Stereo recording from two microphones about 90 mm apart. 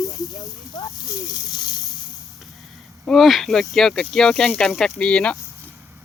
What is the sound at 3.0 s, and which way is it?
Speech, centre (ahead or behind).